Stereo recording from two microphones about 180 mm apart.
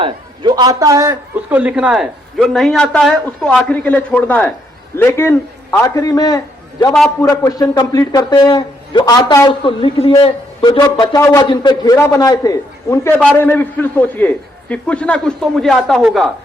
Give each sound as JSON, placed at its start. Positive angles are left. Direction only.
{"t": 0.0, "sound": "a man's voice", "side_deg": -25}